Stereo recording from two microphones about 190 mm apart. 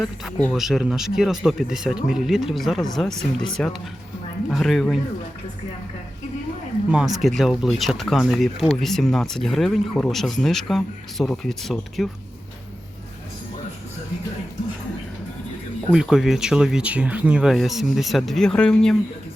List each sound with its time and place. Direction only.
0.0 s speech: 5° left (ahead or behind)
7.2 s speech: centre (ahead or behind)
15.9 s speech: 5° right (ahead or behind)